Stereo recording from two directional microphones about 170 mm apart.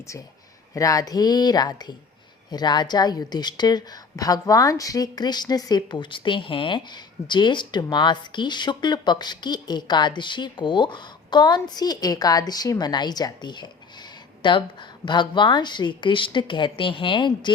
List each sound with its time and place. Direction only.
0.7 s a woman's voice: 20° left (ahead or behind)